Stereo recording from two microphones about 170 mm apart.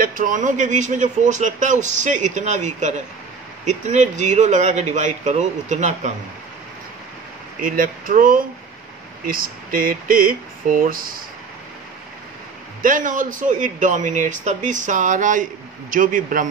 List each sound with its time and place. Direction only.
0.0 s a man's voice: 55° right (ahead or behind)
7.6 s a man's voice: 55° right (ahead or behind)
12.8 s a man's voice: 50° right (ahead or behind)